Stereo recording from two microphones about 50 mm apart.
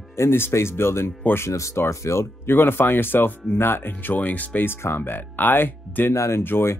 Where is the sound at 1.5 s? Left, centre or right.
Left.